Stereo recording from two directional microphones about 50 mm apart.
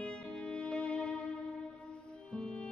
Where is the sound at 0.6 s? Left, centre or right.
Left.